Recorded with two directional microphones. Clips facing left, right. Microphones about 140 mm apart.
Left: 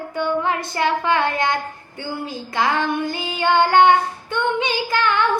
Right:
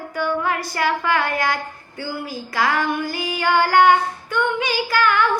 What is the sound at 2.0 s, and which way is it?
Child singing, 25° left (ahead or behind).